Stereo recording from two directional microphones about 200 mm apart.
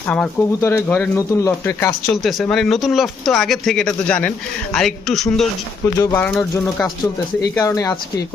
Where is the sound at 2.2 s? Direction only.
Centre (ahead or behind).